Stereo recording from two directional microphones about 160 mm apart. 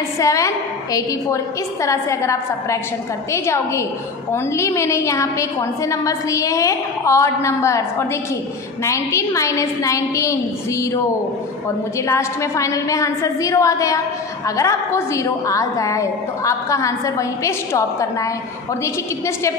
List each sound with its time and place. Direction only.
0.2 s a woman's voice: 20° left (ahead or behind)
8.8 s a woman's voice: 20° left (ahead or behind)
12.1 s a woman's voice: 20° left (ahead or behind)